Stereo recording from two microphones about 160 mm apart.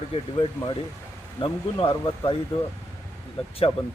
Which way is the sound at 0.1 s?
30° left (ahead or behind).